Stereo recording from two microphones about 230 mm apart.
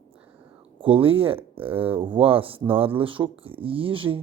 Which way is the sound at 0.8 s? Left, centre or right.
Right.